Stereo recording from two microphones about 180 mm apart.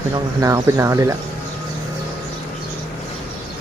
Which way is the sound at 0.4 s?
20° right (ahead or behind).